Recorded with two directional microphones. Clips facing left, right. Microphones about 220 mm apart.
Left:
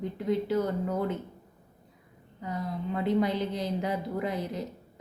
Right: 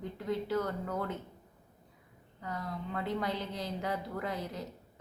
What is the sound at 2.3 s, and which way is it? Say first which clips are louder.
Speech: left 5 dB; 20° left (ahead or behind).